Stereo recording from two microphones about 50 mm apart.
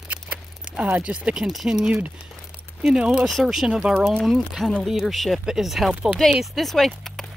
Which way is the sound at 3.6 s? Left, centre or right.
Centre.